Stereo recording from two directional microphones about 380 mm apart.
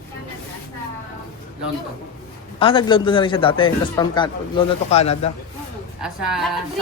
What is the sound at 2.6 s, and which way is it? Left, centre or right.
Speech, centre.